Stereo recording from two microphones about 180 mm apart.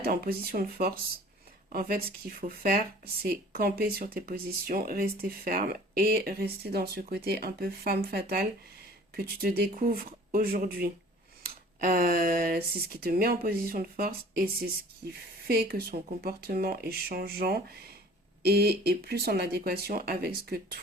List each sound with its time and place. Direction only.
0.0 s speech: 60° right (ahead or behind)